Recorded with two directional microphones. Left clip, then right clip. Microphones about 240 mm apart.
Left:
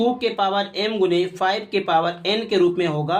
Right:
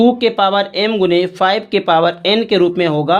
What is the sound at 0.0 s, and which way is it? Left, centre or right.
Speech, right.